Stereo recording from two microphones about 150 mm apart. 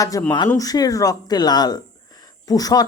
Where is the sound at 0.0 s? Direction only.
25° left (ahead or behind).